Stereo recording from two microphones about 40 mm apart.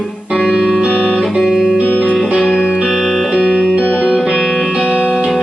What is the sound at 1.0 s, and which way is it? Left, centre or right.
Music, centre.